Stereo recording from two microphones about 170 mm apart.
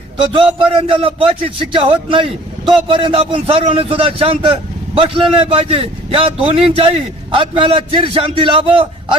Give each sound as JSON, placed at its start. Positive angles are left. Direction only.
{"t": 0.2, "sound": "a man's voice", "side_deg": -30}